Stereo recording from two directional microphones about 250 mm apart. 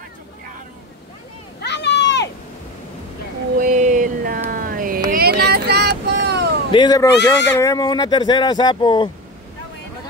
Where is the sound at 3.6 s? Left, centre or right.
Right.